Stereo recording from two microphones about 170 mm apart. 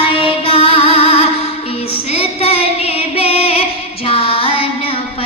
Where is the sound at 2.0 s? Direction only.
35° left (ahead or behind).